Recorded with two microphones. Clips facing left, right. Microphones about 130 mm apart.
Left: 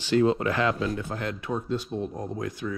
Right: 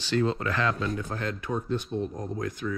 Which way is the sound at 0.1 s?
20° left (ahead or behind).